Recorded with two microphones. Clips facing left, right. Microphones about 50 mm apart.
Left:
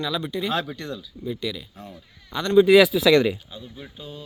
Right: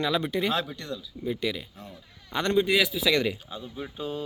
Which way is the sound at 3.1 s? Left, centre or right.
Left.